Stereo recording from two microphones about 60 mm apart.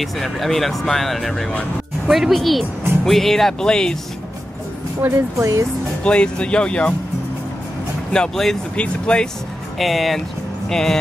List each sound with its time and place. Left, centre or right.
0.0 s speech: centre
5.4 s speech: right
6.0 s speech: centre
8.1 s speech: centre
9.8 s speech: centre